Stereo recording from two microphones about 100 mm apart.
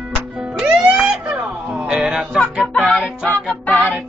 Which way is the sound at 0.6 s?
10° right (ahead or behind).